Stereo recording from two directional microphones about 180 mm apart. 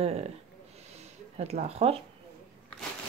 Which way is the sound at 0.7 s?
35° right (ahead or behind).